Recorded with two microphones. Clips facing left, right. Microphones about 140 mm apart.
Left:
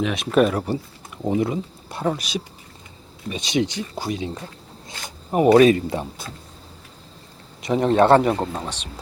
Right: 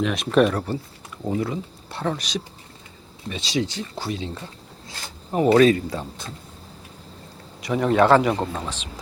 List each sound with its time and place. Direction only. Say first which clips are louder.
0.0 s speech: even; centre (ahead or behind); by 6.2 s 15° left (ahead or behind)
7.6 s a man's voice: left 2 dB; 25° left (ahead or behind)